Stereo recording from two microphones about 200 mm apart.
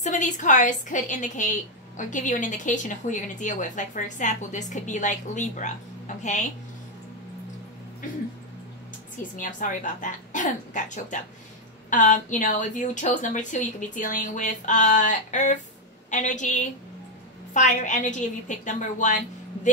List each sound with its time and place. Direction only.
0.0 s a woman's voice: 40° left (ahead or behind)
8.0 s speech: 45° left (ahead or behind)
9.4 s a woman's voice: 40° left (ahead or behind)